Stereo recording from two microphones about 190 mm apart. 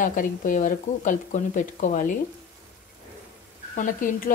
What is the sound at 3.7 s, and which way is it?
Speech, 45° left (ahead or behind).